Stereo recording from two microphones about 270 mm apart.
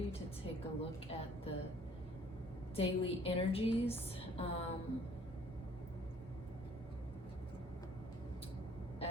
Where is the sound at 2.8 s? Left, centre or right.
Left.